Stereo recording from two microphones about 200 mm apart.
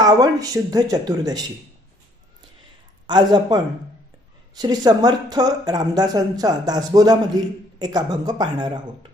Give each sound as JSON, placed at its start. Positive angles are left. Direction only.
{"t": 0.0, "sound": "speech", "side_deg": -20}
{"t": 3.1, "sound": "speech", "side_deg": -20}